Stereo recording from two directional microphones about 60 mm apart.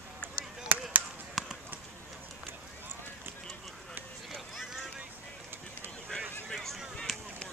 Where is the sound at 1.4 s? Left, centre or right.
Centre.